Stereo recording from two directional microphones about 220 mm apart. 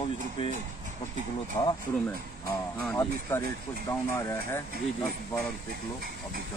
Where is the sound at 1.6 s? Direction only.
20° left (ahead or behind).